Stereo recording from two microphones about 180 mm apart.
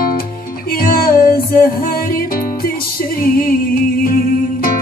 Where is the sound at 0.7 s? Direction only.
55° left (ahead or behind).